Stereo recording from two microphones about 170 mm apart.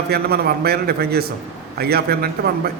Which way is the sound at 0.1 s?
65° right (ahead or behind).